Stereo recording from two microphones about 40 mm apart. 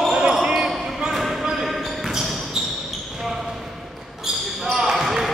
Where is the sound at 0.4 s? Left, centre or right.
Right.